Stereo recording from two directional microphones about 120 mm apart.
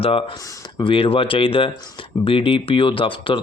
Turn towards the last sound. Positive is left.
turn(degrees=45)  # may be behind; listen again after turning